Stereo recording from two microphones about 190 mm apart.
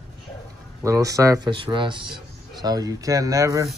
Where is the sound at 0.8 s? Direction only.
15° right (ahead or behind).